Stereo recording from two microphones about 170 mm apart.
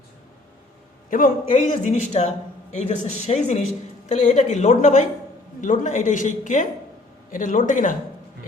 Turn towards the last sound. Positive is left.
turn(degrees=50)  # may be behind; listen again after turning